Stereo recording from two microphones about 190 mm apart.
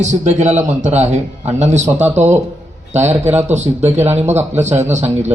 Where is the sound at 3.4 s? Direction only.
35° right (ahead or behind).